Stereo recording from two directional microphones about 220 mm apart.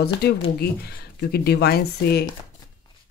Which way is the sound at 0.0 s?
45° left (ahead or behind).